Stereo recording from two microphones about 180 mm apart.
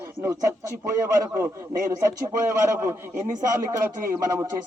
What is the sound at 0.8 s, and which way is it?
Speech, 15° right (ahead or behind).